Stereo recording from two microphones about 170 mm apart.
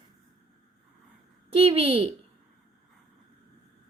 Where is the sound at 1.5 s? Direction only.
35° right (ahead or behind).